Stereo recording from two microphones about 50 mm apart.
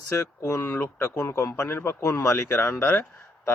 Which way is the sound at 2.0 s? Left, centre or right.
Left.